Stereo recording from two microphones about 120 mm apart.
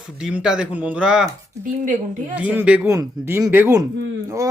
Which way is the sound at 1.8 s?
90° right.